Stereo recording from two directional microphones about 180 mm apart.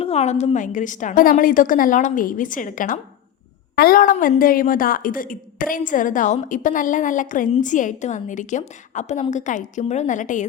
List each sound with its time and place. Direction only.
0.0 s a woman's voice: 35° left (ahead or behind)